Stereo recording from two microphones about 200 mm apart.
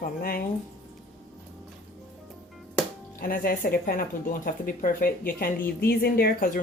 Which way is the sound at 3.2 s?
45° left (ahead or behind).